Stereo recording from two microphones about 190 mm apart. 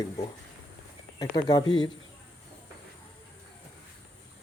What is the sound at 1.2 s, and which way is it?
Speech, 20° left (ahead or behind).